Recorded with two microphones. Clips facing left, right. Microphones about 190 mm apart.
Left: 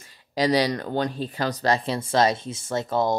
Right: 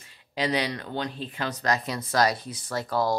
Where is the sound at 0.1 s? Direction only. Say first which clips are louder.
Left 5 dB; 40° left (ahead or behind).